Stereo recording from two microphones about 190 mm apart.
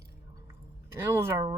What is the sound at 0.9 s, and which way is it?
Speech, 15° right (ahead or behind).